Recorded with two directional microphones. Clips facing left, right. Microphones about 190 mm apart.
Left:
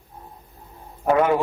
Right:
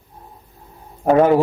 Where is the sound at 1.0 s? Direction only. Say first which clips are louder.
Right 5 dB; 35° right (ahead or behind).